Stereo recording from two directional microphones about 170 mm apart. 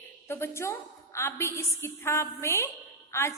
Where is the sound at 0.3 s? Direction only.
15° left (ahead or behind).